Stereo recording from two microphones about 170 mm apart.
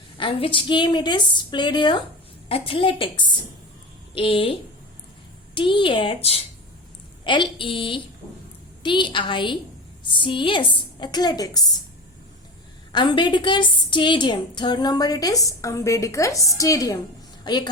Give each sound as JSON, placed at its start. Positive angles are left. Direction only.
{"t": 0.2, "sound": "a woman's voice", "side_deg": 30}
{"t": 5.5, "sound": "a woman's voice", "side_deg": 30}
{"t": 12.9, "sound": "a woman's voice", "side_deg": 25}